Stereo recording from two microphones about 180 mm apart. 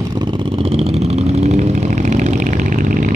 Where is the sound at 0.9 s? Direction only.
35° right (ahead or behind).